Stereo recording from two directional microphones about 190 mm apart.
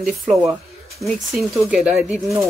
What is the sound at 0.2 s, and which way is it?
Speech, centre (ahead or behind).